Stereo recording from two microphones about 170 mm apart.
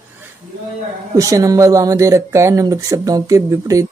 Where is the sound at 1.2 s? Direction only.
20° right (ahead or behind).